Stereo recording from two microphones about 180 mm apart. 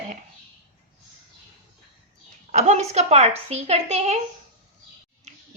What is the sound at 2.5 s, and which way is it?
A woman's voice, 40° right (ahead or behind).